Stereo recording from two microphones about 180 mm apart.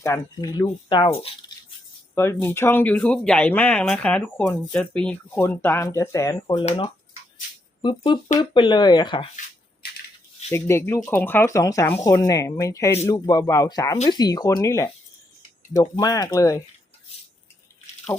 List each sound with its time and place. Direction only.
0.0 s speech: 20° left (ahead or behind)
2.1 s speech: 15° left (ahead or behind)
6.6 s speech: 30° left (ahead or behind)
10.5 s speech: 15° left (ahead or behind)
18.1 s speech: 15° left (ahead or behind)